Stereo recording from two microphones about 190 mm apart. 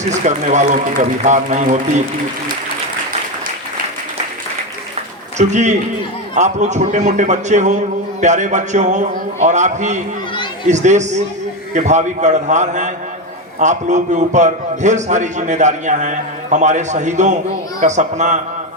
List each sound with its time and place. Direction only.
0.0 s a man's voice: 40° right (ahead or behind)
5.4 s a man's voice: 40° right (ahead or behind)